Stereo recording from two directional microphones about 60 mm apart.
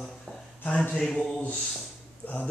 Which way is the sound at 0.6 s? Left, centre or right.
Left.